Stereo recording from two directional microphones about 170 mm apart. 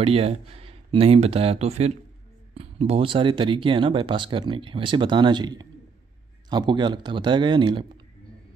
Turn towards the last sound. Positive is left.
turn(degrees=-30)  # may be behind; listen again after turning